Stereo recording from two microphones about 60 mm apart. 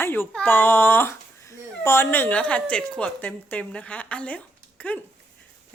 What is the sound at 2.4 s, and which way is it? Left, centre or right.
A woman's voice, left.